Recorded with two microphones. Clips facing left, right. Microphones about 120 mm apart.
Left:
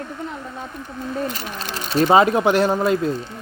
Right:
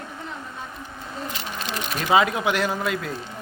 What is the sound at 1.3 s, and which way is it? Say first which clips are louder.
Speech: left 1 dB; 40° left (ahead or behind).